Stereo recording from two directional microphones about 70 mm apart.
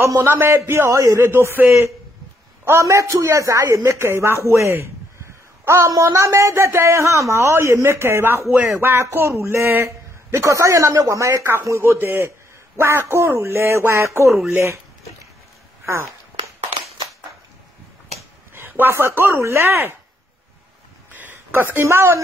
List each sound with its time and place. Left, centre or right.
0.2 s speech: right
0.9 s speech: right
1.2 s speech: right
2.6 s speech: right
3.8 s speech: right
4.5 s a sound: right
5.9 s a woman's voice: right
11.8 s speech: right
15.8 s a sound: right
18.5 s speech: right
21.1 s a sound: right